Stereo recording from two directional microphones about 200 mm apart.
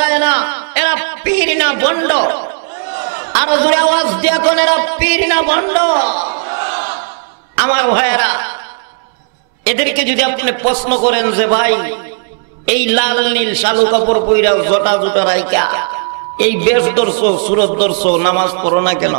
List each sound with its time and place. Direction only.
0.0 s a sound: 10° right (ahead or behind)
3.1 s a man's voice: 15° right (ahead or behind)
6.4 s battle cry: 20° right (ahead or behind)
7.5 s a man's voice: 15° right (ahead or behind)
9.7 s a man's voice: 15° right (ahead or behind)